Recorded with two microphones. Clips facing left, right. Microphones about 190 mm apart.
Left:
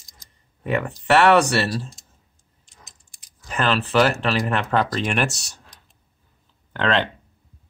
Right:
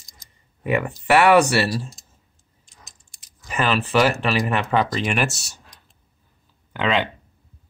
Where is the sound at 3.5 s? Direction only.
5° right (ahead or behind).